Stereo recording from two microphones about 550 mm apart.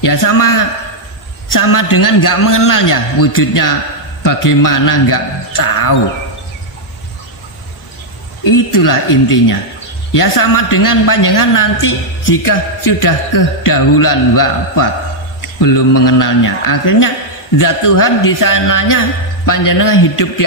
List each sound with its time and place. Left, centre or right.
0.0 s a man's voice: left
1.5 s a man's voice: left
8.5 s a man's voice: left
10.1 s a man's voice: left